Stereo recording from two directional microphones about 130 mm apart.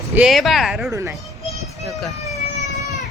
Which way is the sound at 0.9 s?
20° right (ahead or behind).